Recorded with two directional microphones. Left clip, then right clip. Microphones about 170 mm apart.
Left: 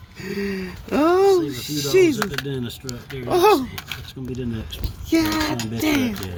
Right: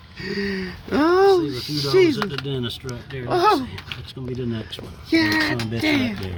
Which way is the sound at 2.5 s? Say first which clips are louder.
Right 2 dB; 30° right (ahead or behind).